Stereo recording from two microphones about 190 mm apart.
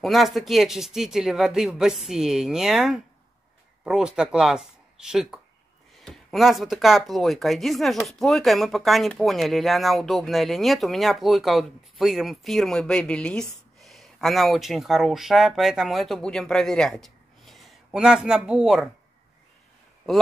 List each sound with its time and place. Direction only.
0.0 s speech: centre (ahead or behind)